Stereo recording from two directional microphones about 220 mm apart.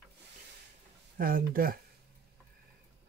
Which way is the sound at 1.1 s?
40° right (ahead or behind).